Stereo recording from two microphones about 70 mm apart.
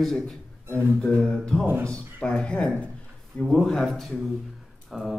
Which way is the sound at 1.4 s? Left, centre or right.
Centre.